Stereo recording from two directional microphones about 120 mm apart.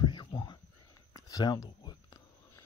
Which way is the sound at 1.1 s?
30° left (ahead or behind).